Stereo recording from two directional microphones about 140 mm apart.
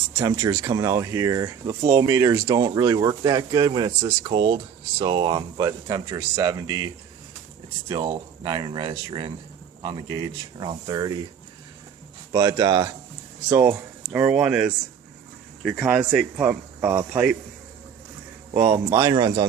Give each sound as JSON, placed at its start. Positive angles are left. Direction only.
{"t": 0.2, "sound": "speech", "side_deg": -25}
{"t": 12.3, "sound": "speech", "side_deg": -25}
{"t": 13.5, "sound": "speech", "side_deg": -20}
{"t": 16.5, "sound": "speech", "side_deg": -20}
{"t": 18.7, "sound": "speech", "side_deg": -30}